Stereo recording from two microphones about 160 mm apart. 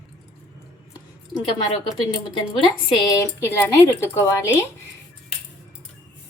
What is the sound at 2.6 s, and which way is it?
Speech, 25° left (ahead or behind).